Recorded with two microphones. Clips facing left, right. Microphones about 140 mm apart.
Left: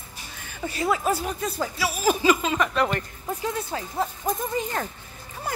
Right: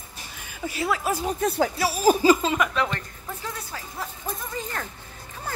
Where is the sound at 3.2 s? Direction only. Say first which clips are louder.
Left 6 dB; 25° left (ahead or behind).